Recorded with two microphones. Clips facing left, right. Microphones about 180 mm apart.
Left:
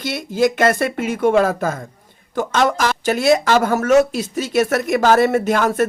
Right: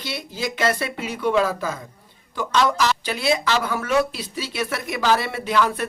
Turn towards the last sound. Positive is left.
turn(degrees=45)  # may be behind; listen again after turning